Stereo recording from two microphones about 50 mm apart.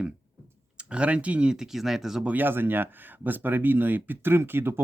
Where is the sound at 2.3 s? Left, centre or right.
Right.